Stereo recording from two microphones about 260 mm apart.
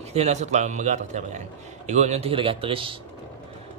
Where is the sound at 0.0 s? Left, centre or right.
Right.